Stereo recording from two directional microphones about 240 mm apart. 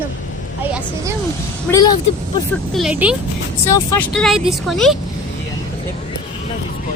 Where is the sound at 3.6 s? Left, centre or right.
Centre.